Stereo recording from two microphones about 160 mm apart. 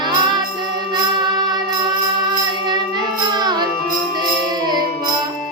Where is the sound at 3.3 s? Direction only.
25° right (ahead or behind).